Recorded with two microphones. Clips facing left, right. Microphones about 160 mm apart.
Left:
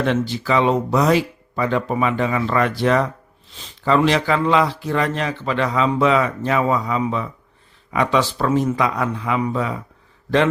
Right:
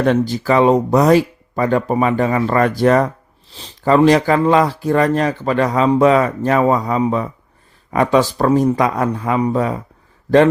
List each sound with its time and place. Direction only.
0.0 s speech: 45° right (ahead or behind)